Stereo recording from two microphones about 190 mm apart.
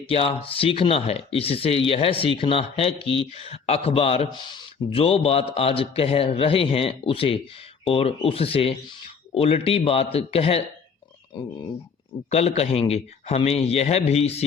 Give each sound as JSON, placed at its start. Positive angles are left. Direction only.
{"t": 0.1, "sound": "a man's voice", "side_deg": 30}
{"t": 12.3, "sound": "a man's voice", "side_deg": 35}